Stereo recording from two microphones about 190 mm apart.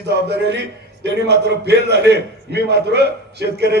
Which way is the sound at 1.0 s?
60° right (ahead or behind).